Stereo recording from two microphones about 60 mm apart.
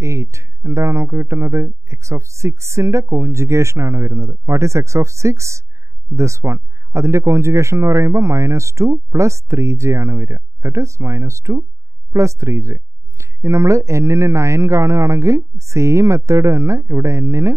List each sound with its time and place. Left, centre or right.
0.0 s speech: right